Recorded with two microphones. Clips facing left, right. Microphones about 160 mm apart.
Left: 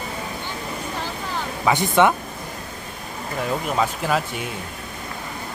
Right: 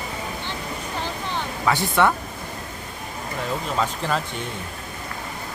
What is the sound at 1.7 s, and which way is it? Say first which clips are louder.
Speech: left 3 dB; 20° left (ahead or behind).